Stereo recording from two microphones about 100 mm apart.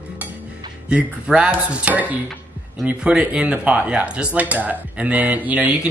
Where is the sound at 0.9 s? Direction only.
10° right (ahead or behind).